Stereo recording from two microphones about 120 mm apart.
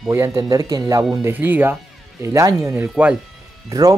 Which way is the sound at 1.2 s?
15° right (ahead or behind).